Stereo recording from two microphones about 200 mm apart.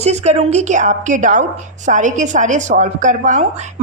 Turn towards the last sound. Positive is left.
turn(degrees=-35)  # may be behind; listen again after turning